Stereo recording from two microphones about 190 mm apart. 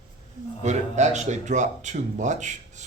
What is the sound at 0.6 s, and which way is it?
A man's voice, 35° right (ahead or behind).